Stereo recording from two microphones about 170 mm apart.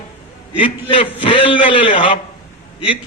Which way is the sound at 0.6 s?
30° left (ahead or behind).